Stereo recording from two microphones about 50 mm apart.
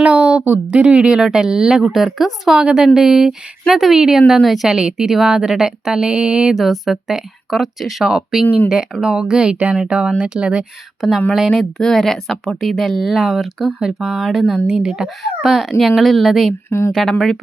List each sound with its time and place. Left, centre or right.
0.0 s speech: right; by 2.6 s centre
2.6 s speech: centre
6.6 s speech: centre
8.4 s speech: left
9.0 s speech: centre
11.0 s speech: centre
11.8 s speech: centre
16.6 s speech: left
17.1 s speech: centre